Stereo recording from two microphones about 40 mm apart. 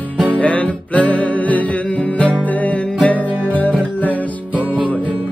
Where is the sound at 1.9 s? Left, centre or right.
Left.